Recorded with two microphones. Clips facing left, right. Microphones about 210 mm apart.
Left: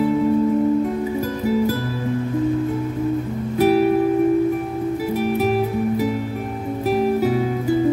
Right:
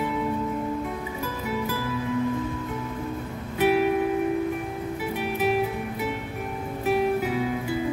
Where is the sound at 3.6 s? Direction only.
40° left (ahead or behind).